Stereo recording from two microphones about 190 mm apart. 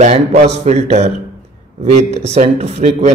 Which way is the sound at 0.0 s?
35° right (ahead or behind).